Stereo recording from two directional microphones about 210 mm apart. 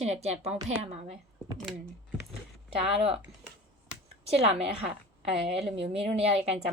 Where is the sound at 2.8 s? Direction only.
30° right (ahead or behind).